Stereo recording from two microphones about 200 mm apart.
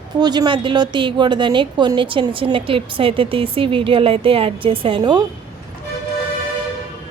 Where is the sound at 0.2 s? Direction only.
20° right (ahead or behind).